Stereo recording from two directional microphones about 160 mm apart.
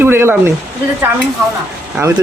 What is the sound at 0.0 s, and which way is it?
Speech, 15° right (ahead or behind).